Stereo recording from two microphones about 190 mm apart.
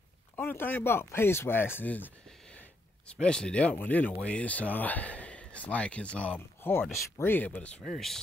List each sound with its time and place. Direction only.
0.4 s speech: 10° left (ahead or behind)